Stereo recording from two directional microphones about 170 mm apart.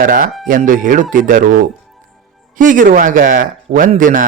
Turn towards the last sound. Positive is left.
turn(degrees=-50)  # may be behind; listen again after turning